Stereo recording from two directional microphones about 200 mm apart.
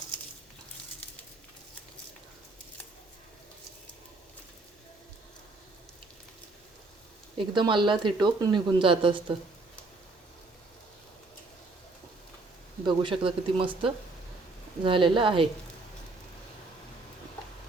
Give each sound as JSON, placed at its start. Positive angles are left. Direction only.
{"t": 7.3, "sound": "speech", "side_deg": -25}
{"t": 12.8, "sound": "speech", "side_deg": -25}